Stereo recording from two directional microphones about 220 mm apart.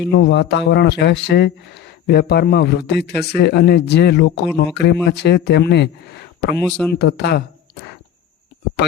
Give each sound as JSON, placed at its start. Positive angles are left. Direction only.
{"t": 0.0, "sound": "speech", "side_deg": 50}
{"t": 6.6, "sound": "speech", "side_deg": 5}
{"t": 7.0, "sound": "speech", "side_deg": 50}